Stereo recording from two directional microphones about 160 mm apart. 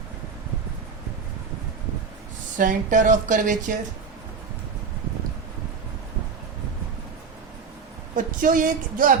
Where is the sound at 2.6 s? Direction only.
55° right (ahead or behind).